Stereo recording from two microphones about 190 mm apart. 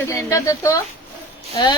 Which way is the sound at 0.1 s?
15° left (ahead or behind).